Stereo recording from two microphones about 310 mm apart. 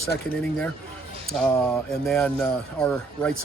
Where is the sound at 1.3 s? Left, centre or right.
Centre.